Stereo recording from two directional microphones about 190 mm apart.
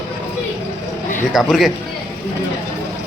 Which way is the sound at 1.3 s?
Centre (ahead or behind).